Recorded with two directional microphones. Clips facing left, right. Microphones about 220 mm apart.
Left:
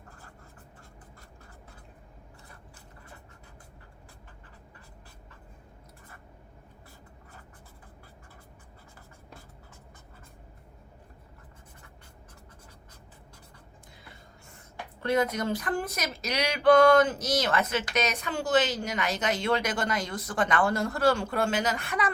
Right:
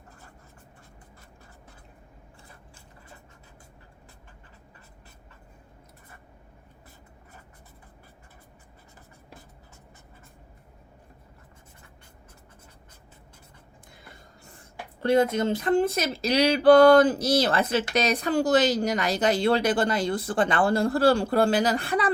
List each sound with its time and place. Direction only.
15.0 s speech: 30° right (ahead or behind)